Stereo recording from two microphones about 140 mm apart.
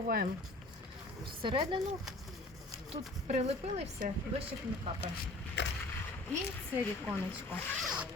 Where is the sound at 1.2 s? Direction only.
35° right (ahead or behind).